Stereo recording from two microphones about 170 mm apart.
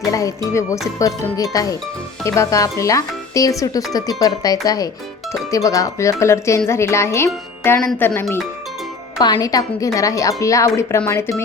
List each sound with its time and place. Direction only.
0.1 s a woman's voice: 20° left (ahead or behind)
9.1 s a woman's voice: 25° left (ahead or behind)